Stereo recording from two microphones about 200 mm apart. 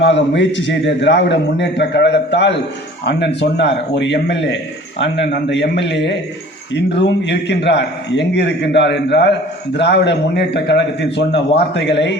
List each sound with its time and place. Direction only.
0.0 s a man's voice: 65° left (ahead or behind)